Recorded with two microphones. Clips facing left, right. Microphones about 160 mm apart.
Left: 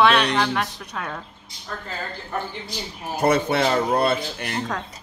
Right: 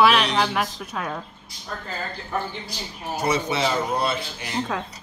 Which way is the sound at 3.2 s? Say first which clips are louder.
Left 4 dB; 60° left (ahead or behind).